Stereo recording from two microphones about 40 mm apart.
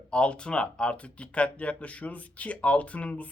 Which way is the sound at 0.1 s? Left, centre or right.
Left.